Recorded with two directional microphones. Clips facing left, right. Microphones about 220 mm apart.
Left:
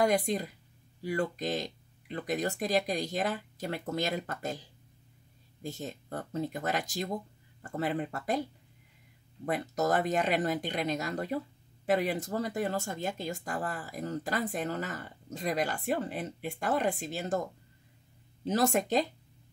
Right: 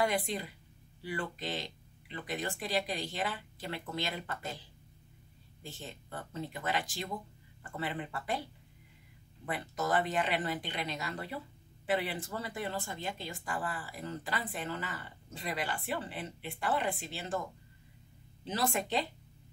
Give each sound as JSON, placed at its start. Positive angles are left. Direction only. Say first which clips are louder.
{"t": 0.0, "sound": "speech", "louder": "left 5 dB", "side_deg": 40}
{"t": 5.6, "sound": "speech", "louder": "left 8 dB", "side_deg": 40}
{"t": 9.5, "sound": "speech", "louder": "left 4 dB", "side_deg": 40}
{"t": 18.4, "sound": "speech", "louder": "left 6 dB", "side_deg": 45}